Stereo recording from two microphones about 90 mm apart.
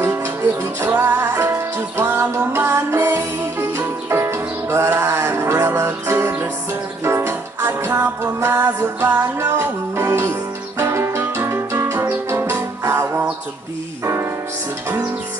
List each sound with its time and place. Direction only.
0.0 s music: 30° right (ahead or behind)